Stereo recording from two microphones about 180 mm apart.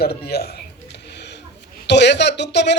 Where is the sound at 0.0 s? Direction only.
60° left (ahead or behind).